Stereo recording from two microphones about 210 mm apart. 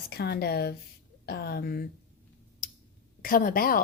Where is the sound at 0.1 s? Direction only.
50° left (ahead or behind).